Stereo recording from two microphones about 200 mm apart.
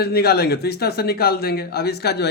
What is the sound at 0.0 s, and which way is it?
A man's voice, 50° left (ahead or behind).